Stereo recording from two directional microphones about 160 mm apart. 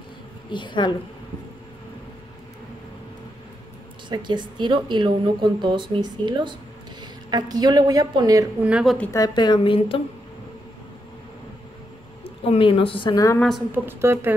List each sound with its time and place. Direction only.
0.5 s speech: 30° left (ahead or behind)
4.1 s a woman's voice: 30° right (ahead or behind)
8.5 s a woman's voice: 5° right (ahead or behind)
8.9 s a woman's voice: 10° left (ahead or behind)
9.2 s a woman's voice: 25° left (ahead or behind)
12.4 s a woman's voice: 35° left (ahead or behind)
13.7 s a woman's voice: 15° right (ahead or behind)